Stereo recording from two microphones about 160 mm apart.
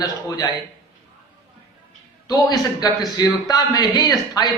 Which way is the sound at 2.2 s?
25° left (ahead or behind).